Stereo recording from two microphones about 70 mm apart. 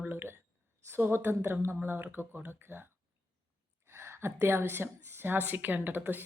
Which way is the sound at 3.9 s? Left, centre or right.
Right.